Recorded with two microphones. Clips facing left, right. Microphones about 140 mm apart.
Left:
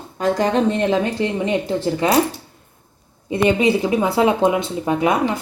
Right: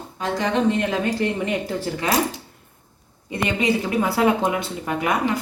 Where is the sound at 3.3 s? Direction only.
25° left (ahead or behind).